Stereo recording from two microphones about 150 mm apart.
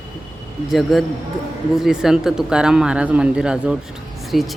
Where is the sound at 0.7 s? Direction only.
Centre (ahead or behind).